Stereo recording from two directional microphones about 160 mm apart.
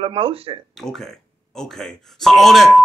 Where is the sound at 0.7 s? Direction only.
Centre (ahead or behind).